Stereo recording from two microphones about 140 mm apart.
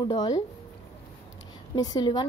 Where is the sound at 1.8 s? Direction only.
30° left (ahead or behind).